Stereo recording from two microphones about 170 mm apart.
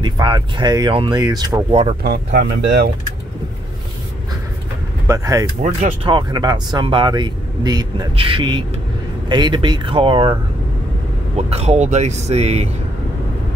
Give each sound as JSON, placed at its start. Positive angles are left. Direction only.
{"t": 0.0, "sound": "speech", "side_deg": -25}
{"t": 1.7, "sound": "a man's voice", "side_deg": -40}
{"t": 2.0, "sound": "speech", "side_deg": -75}
{"t": 5.0, "sound": "speech", "side_deg": -20}
{"t": 5.6, "sound": "speech", "side_deg": -45}
{"t": 6.0, "sound": "speech", "side_deg": -25}
{"t": 11.3, "sound": "a man's voice", "side_deg": -40}